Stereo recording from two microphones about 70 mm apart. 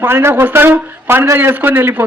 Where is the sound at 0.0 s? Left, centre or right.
Right.